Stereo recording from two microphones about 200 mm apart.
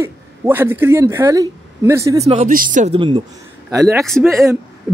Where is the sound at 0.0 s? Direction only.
10° right (ahead or behind).